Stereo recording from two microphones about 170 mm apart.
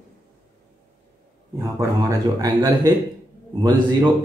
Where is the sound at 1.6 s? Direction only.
20° right (ahead or behind).